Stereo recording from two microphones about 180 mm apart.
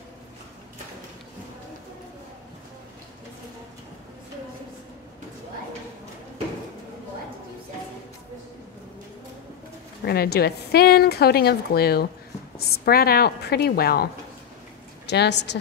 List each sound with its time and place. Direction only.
10.0 s a woman's voice: 60° left (ahead or behind)
15.0 s a woman's voice: 70° left (ahead or behind)